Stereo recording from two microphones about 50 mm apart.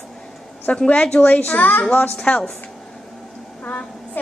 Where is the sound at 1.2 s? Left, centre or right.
Left.